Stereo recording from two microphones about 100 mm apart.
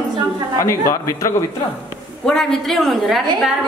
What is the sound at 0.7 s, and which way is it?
Speech, 30° left (ahead or behind).